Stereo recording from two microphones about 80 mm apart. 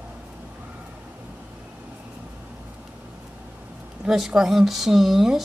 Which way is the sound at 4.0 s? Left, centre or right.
Centre.